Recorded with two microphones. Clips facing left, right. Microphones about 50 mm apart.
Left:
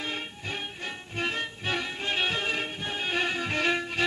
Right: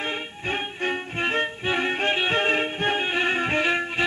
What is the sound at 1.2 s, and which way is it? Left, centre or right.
Violin, right.